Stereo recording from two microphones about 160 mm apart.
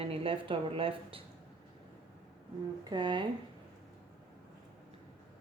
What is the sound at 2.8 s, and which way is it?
Speech, 30° right (ahead or behind).